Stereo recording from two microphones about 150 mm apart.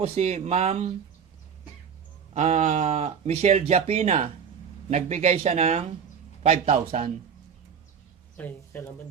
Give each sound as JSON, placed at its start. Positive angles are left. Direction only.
{"t": 0.0, "sound": "speech", "side_deg": -45}
{"t": 2.3, "sound": "speech", "side_deg": -45}
{"t": 8.4, "sound": "speech", "side_deg": 10}